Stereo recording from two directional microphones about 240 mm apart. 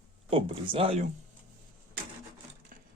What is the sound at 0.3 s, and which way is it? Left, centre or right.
Speech, right.